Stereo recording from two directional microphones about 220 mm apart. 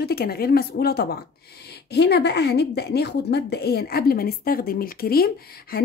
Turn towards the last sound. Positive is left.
turn(degrees=45)  # may be behind; listen again after turning